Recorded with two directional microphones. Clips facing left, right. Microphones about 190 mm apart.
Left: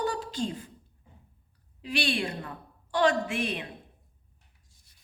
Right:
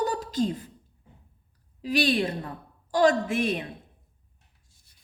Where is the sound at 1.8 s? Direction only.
40° right (ahead or behind).